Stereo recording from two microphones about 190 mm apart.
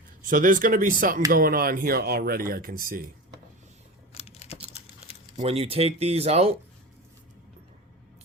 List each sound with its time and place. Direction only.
0.2 s speech: 45° right (ahead or behind)
4.1 s computer keyboard: 35° left (ahead or behind)
5.4 s speech: 30° right (ahead or behind)